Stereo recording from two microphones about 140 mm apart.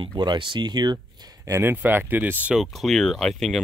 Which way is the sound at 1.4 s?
20° right (ahead or behind).